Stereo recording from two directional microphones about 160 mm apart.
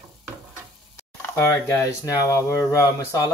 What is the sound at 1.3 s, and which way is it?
Speech, 15° left (ahead or behind).